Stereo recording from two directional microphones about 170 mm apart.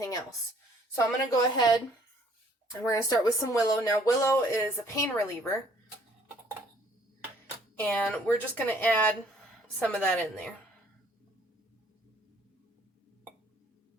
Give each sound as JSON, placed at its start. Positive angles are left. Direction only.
{"t": 0.9, "sound": "speech", "side_deg": 20}
{"t": 2.8, "sound": "speech", "side_deg": 20}
{"t": 7.8, "sound": "a woman's voice", "side_deg": 10}